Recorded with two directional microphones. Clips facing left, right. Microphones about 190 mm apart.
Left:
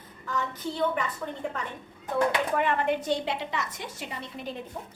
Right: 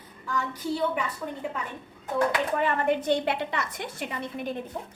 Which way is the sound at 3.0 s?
60° right (ahead or behind).